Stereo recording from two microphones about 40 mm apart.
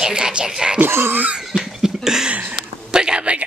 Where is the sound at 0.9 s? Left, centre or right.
Right.